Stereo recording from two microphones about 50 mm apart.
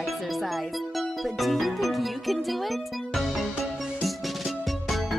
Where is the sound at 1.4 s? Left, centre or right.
Centre.